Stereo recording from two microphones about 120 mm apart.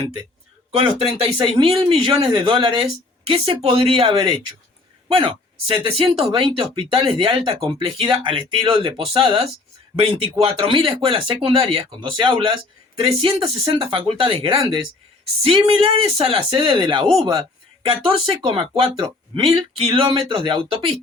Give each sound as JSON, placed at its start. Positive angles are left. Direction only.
{"t": 0.8, "sound": "speech", "side_deg": -50}